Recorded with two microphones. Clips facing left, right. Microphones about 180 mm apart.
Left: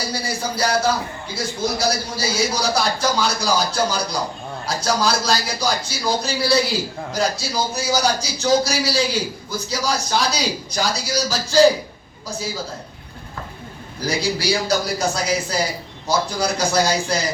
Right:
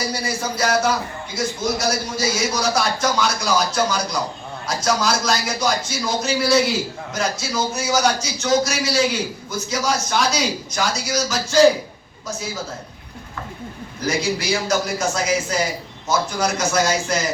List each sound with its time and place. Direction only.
0.1 s music: 35° left (ahead or behind)
1.4 s a man's voice: 35° left (ahead or behind)
14.0 s a man's voice: 35° left (ahead or behind)